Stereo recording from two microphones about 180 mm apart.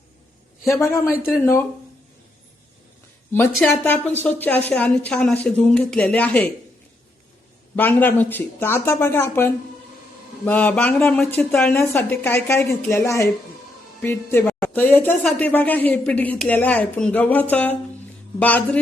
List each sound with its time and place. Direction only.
0.6 s speech: 15° left (ahead or behind)
3.6 s speech: 10° left (ahead or behind)
7.8 s speech: 10° left (ahead or behind)